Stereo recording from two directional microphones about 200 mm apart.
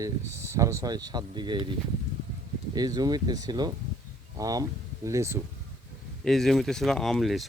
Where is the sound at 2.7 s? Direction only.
20° right (ahead or behind).